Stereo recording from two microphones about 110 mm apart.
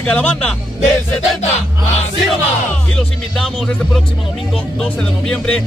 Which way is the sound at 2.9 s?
5° left (ahead or behind).